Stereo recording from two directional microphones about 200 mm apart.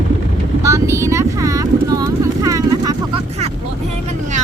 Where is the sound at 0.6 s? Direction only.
15° right (ahead or behind).